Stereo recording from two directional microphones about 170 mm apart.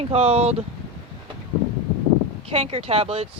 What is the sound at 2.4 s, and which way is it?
Speech, 35° right (ahead or behind).